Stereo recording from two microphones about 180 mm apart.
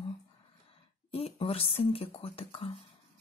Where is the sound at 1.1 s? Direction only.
30° left (ahead or behind).